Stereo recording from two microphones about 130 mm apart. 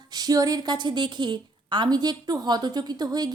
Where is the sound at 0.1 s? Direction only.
30° right (ahead or behind).